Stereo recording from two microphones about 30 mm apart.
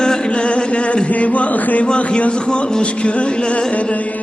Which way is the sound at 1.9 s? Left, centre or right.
Left.